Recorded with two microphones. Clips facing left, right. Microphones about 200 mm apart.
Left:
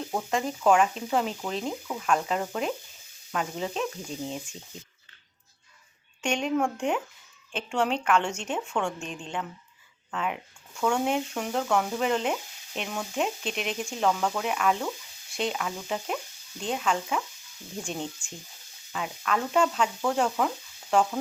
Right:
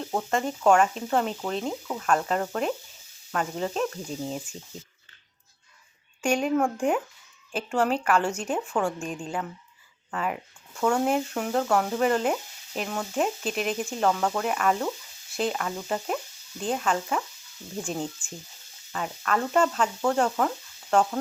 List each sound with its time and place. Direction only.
0.1 s stir: centre (ahead or behind)
6.2 s speech: 5° right (ahead or behind)
7.5 s stir: 5° right (ahead or behind)
8.4 s speech: 5° right (ahead or behind)
10.8 s stir: centre (ahead or behind)